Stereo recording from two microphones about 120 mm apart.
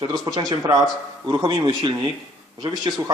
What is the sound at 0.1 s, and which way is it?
A man's voice, 30° right (ahead or behind).